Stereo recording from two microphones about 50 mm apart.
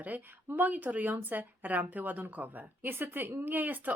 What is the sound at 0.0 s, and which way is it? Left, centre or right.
A woman's voice, right.